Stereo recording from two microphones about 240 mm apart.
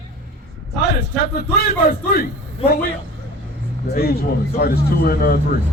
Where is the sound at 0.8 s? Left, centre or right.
Left.